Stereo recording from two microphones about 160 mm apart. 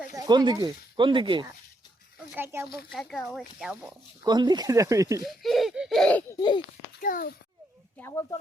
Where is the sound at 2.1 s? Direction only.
15° right (ahead or behind).